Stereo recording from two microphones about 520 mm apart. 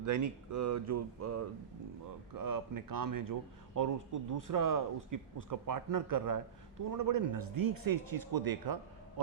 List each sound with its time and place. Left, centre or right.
0.0 s a man's voice: right